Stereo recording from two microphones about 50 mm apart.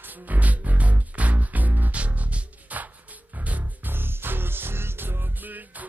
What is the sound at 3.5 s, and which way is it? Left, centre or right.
Music, right.